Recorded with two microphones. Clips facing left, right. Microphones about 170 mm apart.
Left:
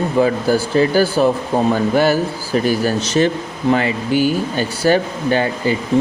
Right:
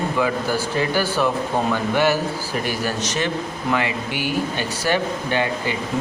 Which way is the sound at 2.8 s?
30° left (ahead or behind).